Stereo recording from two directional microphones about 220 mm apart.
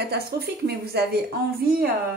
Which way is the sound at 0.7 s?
45° right (ahead or behind).